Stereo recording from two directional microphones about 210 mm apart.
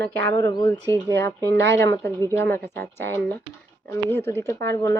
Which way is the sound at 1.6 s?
55° right (ahead or behind).